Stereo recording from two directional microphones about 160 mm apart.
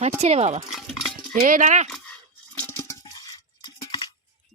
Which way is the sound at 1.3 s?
55° right (ahead or behind).